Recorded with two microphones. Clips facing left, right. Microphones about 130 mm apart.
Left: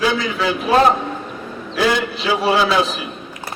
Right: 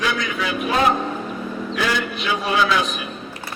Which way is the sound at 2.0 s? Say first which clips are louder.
Left 4 dB; 30° left (ahead or behind).